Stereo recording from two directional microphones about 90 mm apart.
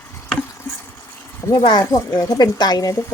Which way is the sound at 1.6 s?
60° left (ahead or behind).